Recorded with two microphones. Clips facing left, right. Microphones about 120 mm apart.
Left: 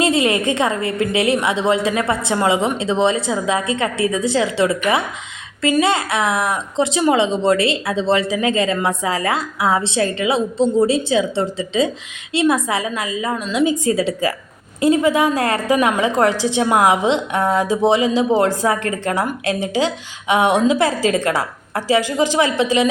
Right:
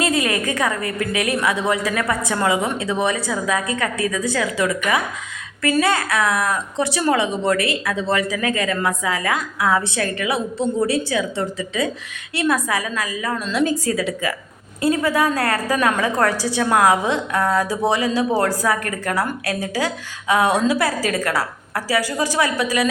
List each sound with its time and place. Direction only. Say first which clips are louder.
0.0 s a woman's voice: left 4 dB; 25° left (ahead or behind)
13.3 s a woman's voice: left 2 dB; 10° left (ahead or behind)
13.9 s a woman's voice: left 4 dB; 30° left (ahead or behind)
14.8 s a woman's voice: left 4 dB; 20° left (ahead or behind)